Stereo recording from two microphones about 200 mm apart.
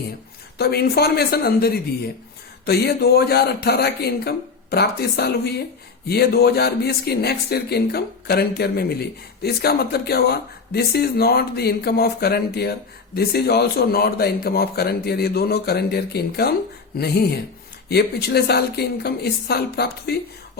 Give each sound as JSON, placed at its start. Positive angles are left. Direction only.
{"t": 0.6, "sound": "speech", "side_deg": 50}